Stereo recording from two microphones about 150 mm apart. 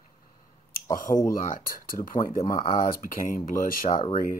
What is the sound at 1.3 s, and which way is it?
Speech, 65° left (ahead or behind).